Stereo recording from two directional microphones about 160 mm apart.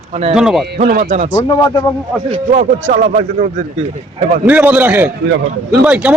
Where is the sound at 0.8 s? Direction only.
50° right (ahead or behind).